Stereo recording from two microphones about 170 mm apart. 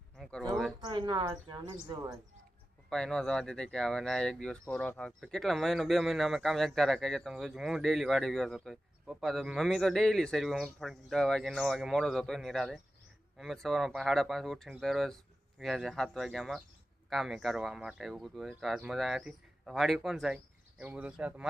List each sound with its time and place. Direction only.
0.2 s a sound: 5° left (ahead or behind)
0.8 s speech: 25° right (ahead or behind)
2.9 s speech: 5° left (ahead or behind)